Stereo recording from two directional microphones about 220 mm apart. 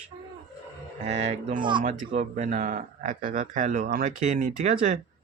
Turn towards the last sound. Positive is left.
turn(degrees=-35)  # may be behind; listen again after turning